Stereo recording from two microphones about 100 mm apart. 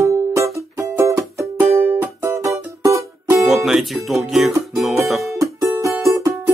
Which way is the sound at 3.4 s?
Centre (ahead or behind).